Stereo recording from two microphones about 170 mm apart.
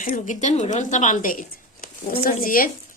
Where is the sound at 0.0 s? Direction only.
50° left (ahead or behind).